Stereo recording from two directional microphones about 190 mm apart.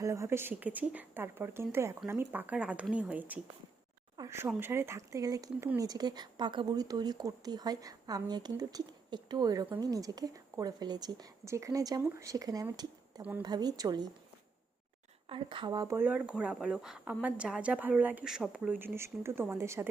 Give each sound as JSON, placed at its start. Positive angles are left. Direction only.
{"t": 0.0, "sound": "speech", "side_deg": -15}
{"t": 15.3, "sound": "speech", "side_deg": -25}